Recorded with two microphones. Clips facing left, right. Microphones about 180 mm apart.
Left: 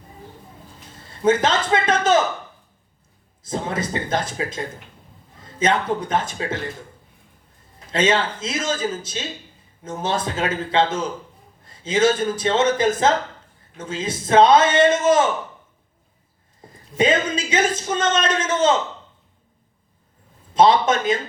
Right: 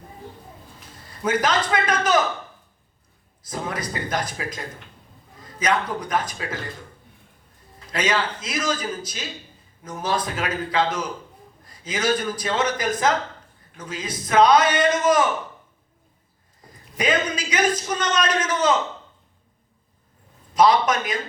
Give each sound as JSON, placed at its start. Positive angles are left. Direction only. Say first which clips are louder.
{"t": 1.2, "sound": "a man's voice", "louder": "left 4 dB", "side_deg": 25}
{"t": 3.4, "sound": "a man's voice", "louder": "left 4 dB", "side_deg": 25}
{"t": 7.9, "sound": "a man's voice", "louder": "left 4 dB", "side_deg": 25}
{"t": 16.6, "sound": "speech", "louder": "left 8 dB", "side_deg": 25}
{"t": 20.5, "sound": "a man's voice", "louder": "left 2 dB", "side_deg": 25}